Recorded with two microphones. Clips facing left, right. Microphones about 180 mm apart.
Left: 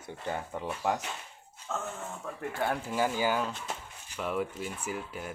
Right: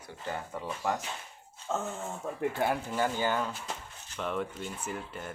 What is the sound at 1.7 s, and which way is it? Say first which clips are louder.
Speech: right 3 dB; 20° right (ahead or behind).